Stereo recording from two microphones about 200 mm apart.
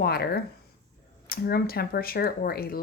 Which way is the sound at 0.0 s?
50° left (ahead or behind).